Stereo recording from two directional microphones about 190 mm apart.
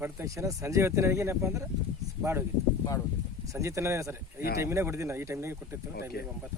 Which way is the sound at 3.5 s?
15° right (ahead or behind).